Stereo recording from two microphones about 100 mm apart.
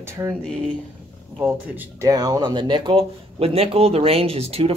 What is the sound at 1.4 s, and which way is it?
Speech, 15° right (ahead or behind).